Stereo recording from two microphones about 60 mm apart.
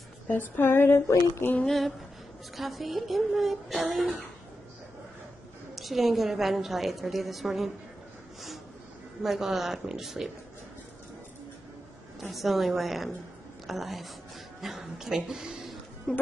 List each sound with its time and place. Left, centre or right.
0.3 s a sound: left
1.6 s a woman's voice: centre
5.8 s a woman's voice: centre
9.2 s a woman's voice: centre
12.2 s a woman's voice: centre
16.1 s speech: centre